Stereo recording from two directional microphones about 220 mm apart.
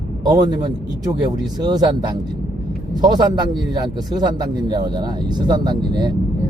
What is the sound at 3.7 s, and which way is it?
Speech, 20° right (ahead or behind).